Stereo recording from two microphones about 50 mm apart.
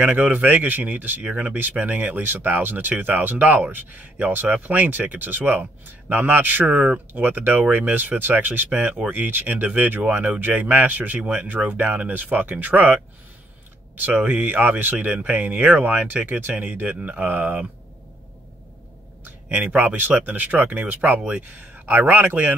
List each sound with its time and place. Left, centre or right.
0.0 s speech: right
14.0 s speech: right
19.2 s speech: right